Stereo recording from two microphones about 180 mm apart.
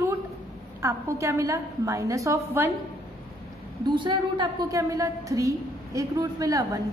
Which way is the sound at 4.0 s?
25° right (ahead or behind).